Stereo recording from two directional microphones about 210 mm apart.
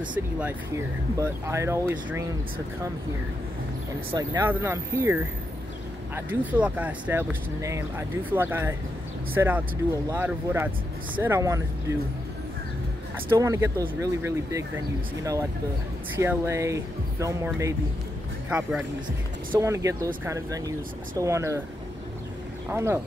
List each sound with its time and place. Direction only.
0.1 s speech: 10° right (ahead or behind)
4.1 s speech: 20° right (ahead or behind)
13.3 s speech: 15° right (ahead or behind)
16.2 s speech: 15° right (ahead or behind)
22.7 s speech: 10° right (ahead or behind)